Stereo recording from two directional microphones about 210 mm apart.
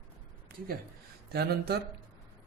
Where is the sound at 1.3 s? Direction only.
50° right (ahead or behind).